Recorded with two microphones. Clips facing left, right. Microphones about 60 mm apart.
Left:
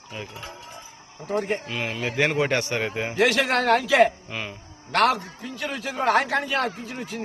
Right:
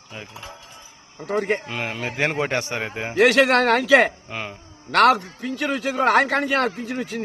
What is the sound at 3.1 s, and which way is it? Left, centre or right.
Speech, right.